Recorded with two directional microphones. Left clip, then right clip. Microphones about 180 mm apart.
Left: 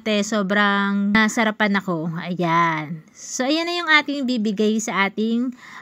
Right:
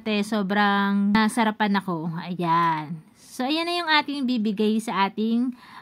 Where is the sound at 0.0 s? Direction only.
5° left (ahead or behind).